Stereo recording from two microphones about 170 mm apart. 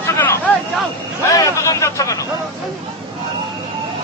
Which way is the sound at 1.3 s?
20° left (ahead or behind).